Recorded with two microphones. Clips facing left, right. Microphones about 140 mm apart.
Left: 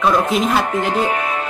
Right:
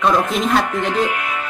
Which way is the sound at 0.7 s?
35° left (ahead or behind).